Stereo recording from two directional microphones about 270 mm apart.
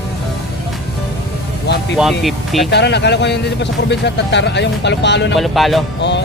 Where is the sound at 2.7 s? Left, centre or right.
Left.